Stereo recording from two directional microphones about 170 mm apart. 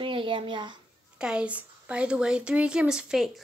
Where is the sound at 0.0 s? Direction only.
30° right (ahead or behind).